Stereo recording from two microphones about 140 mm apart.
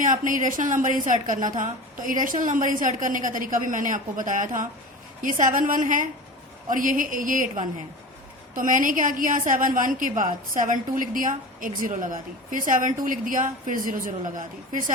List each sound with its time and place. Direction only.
0.0 s a woman's voice: 70° right (ahead or behind)